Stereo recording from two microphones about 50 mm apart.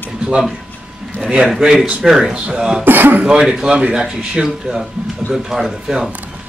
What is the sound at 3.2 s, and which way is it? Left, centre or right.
A man's voice, centre.